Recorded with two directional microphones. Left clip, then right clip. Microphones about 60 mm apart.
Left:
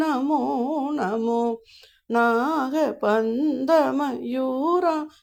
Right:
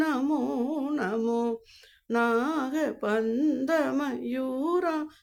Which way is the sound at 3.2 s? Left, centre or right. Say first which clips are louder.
Left 3 dB; centre.